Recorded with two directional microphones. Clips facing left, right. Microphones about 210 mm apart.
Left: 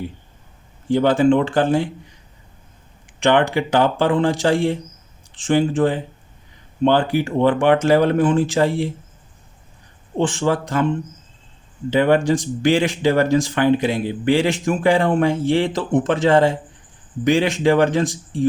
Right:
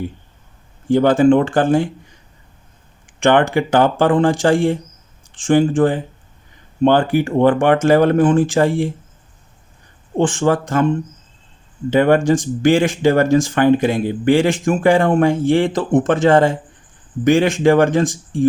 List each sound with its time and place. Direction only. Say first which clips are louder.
0.9 s speech: right 3 dB; 50° right (ahead or behind)
3.2 s speech: right 3 dB; 50° right (ahead or behind)
10.2 s speech: right 3 dB; 50° right (ahead or behind)